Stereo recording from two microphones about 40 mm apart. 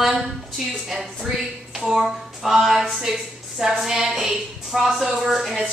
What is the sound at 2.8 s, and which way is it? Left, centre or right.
A woman's voice, centre.